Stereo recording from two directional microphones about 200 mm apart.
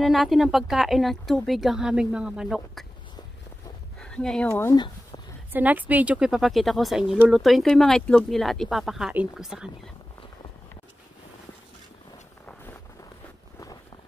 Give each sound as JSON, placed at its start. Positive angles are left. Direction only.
{"t": 0.0, "sound": "a woman's voice", "side_deg": 0}
{"t": 4.0, "sound": "speech", "side_deg": 5}
{"t": 4.7, "sound": "a sound", "side_deg": 20}
{"t": 5.5, "sound": "a woman's voice", "side_deg": -10}